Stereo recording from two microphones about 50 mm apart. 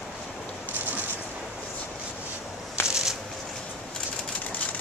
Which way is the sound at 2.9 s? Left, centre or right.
Centre.